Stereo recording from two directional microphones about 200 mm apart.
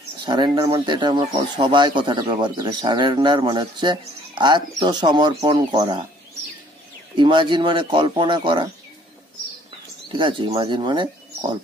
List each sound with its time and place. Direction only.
0.2 s speech: 20° right (ahead or behind)
7.2 s speech: 25° right (ahead or behind)
10.1 s speech: 25° right (ahead or behind)